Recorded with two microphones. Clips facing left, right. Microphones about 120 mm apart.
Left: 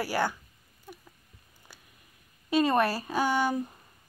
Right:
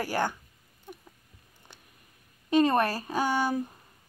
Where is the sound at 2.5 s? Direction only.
15° left (ahead or behind).